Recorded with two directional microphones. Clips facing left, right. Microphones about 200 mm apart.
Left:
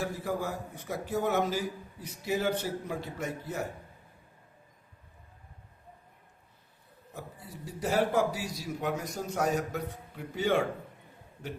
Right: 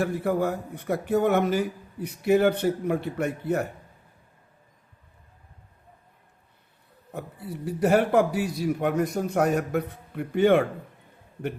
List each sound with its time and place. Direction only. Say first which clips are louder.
0.0 s a man's voice: right 8 dB; 60° right (ahead or behind)
7.1 s a man's voice: right 9 dB; 60° right (ahead or behind)